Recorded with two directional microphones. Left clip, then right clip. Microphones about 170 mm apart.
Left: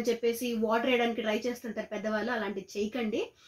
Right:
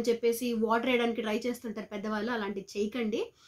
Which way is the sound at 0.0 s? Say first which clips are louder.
Right 1 dB; 35° right (ahead or behind).